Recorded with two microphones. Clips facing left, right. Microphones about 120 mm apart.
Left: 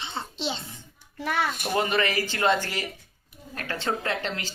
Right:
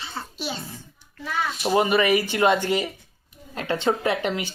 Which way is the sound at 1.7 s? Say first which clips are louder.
Right 7 dB; 15° right (ahead or behind).